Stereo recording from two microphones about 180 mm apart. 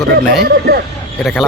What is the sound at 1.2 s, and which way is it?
Speech, centre (ahead or behind).